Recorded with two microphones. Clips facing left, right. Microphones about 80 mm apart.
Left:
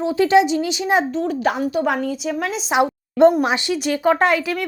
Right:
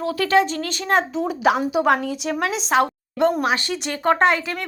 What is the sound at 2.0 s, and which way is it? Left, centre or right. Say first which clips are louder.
Speech: left 1 dB; centre.